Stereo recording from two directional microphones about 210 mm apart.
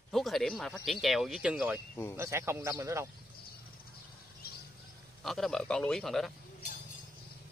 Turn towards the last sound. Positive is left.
turn(degrees=0)  # may be behind; listen again after turning